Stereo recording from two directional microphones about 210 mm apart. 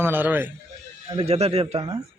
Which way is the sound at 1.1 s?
25° right (ahead or behind).